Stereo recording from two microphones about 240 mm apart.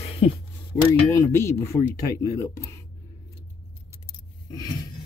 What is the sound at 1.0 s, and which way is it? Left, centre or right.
Speech, centre.